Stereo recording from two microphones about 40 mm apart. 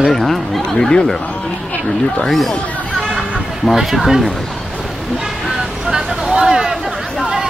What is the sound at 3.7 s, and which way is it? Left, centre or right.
Speech, centre.